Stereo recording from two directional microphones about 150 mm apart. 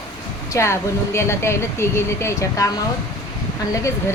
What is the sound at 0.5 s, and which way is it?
Speech, 20° left (ahead or behind).